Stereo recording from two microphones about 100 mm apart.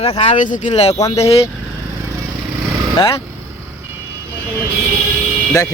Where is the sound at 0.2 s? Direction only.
80° left.